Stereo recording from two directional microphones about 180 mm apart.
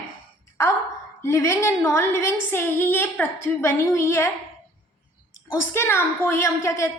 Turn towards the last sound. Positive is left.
turn(degrees=15)  # may be behind; listen again after turning